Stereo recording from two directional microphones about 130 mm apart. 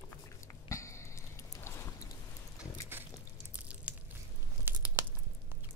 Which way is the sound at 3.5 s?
10° right (ahead or behind).